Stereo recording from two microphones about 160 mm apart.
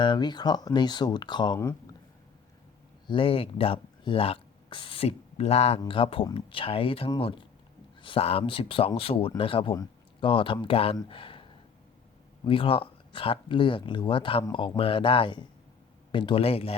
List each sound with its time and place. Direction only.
0.0 s speech: 30° left (ahead or behind)
3.1 s speech: 35° left (ahead or behind)
12.5 s speech: 35° left (ahead or behind)